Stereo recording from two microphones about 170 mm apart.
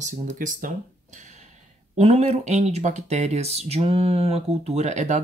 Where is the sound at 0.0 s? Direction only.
50° right (ahead or behind).